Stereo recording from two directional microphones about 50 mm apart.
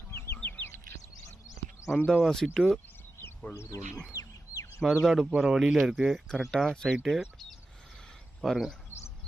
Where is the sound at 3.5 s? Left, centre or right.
Left.